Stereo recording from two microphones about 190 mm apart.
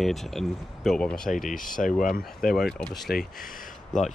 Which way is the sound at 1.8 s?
45° left (ahead or behind).